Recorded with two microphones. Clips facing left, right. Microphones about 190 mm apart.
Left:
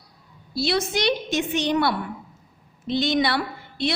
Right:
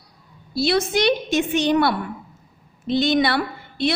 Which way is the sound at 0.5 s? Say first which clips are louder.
Right 4 dB; 55° right (ahead or behind).